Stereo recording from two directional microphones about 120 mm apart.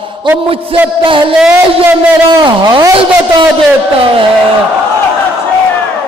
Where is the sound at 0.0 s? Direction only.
45° right (ahead or behind).